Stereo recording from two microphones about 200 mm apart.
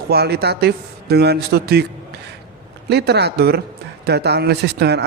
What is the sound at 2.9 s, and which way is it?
Speech, 55° right (ahead or behind).